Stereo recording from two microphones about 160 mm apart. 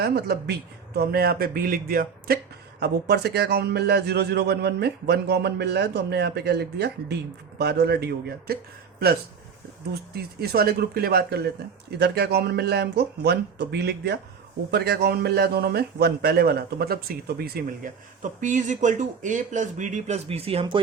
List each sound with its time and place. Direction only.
0.0 s a man's voice: 80° right
2.8 s a man's voice: 90° right
10.4 s speech: 80° right
11.9 s a man's voice: 90° right
18.2 s speech: 55° right (ahead or behind); by 20.8 s 35° right (ahead or behind)